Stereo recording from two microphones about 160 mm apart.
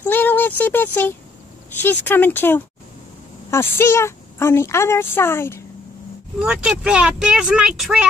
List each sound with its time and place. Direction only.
0.0 s a sound: 10° left (ahead or behind)
1.8 s a woman's voice: 10° left (ahead or behind)
6.4 s speech: 5° right (ahead or behind)